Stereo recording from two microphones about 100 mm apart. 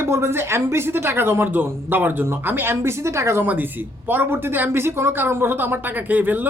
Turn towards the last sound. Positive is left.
turn(degrees=-15)  # may be behind; listen again after turning